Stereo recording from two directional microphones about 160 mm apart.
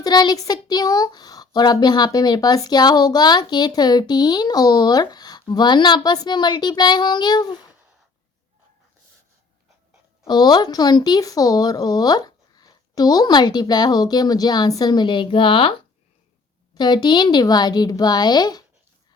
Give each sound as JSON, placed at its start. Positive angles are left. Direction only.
{"t": 0.0, "sound": "speech", "side_deg": 25}
{"t": 10.2, "sound": "speech", "side_deg": 25}
{"t": 16.7, "sound": "speech", "side_deg": 25}